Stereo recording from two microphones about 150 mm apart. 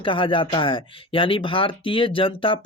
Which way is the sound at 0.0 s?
35° left (ahead or behind).